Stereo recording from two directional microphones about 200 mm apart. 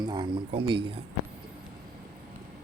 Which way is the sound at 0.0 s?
20° right (ahead or behind).